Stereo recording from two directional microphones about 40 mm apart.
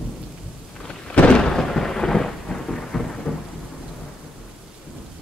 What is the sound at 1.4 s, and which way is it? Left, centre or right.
Thunder, centre.